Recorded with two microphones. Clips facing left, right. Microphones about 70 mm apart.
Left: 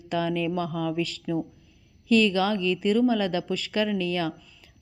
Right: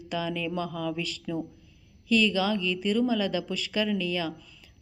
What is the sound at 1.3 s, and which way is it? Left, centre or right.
Speech, left.